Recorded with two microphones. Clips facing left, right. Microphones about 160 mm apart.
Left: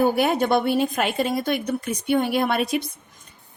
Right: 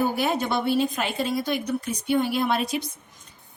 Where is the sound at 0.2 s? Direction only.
60° left (ahead or behind).